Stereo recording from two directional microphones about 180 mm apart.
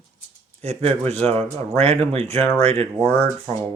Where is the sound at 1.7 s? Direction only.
35° right (ahead or behind).